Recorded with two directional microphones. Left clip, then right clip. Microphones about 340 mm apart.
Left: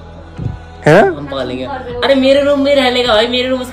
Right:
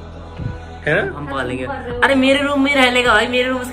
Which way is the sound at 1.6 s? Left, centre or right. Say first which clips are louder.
Even; centre.